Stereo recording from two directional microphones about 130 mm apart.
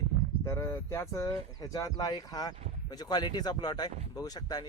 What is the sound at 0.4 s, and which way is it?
Speech, 20° left (ahead or behind).